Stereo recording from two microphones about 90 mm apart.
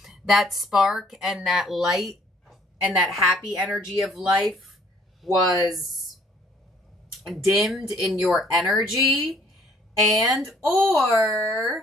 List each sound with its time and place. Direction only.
0.3 s speech: centre (ahead or behind)
7.2 s speech: centre (ahead or behind)